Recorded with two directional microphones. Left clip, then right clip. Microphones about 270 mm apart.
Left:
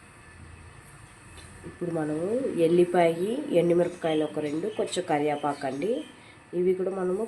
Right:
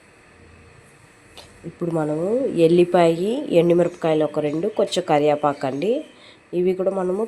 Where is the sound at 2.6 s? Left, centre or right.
Centre.